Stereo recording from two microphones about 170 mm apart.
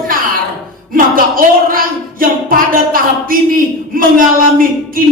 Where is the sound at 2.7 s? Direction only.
55° right (ahead or behind).